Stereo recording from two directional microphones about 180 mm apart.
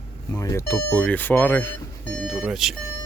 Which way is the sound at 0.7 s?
5° left (ahead or behind).